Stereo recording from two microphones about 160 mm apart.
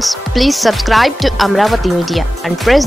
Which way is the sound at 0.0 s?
Centre (ahead or behind).